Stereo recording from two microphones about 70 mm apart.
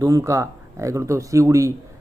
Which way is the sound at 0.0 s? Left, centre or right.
Right.